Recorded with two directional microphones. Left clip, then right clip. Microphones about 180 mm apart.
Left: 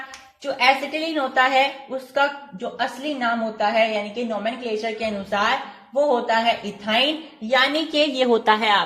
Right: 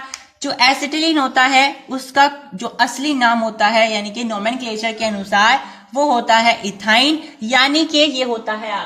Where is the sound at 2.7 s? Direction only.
Centre (ahead or behind).